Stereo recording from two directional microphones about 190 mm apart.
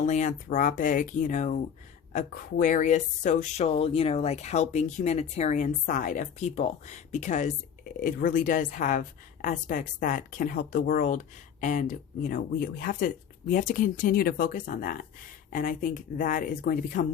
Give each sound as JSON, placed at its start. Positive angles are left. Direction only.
{"t": 0.0, "sound": "speech", "side_deg": 40}